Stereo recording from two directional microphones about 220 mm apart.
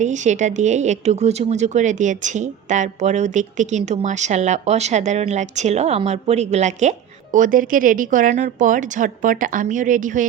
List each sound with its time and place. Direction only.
0.0 s speech: 35° right (ahead or behind)